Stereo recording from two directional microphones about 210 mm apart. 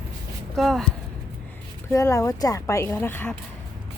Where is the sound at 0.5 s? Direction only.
Centre (ahead or behind).